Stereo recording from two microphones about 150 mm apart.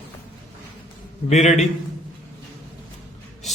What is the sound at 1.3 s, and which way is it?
Music, 50° left (ahead or behind).